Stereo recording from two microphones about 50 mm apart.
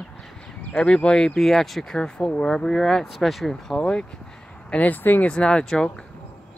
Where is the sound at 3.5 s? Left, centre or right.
Centre.